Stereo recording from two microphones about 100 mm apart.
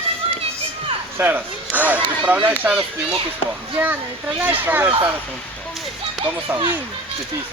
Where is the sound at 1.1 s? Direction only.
20° right (ahead or behind).